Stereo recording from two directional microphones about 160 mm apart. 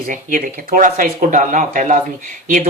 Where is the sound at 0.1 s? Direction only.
55° right (ahead or behind).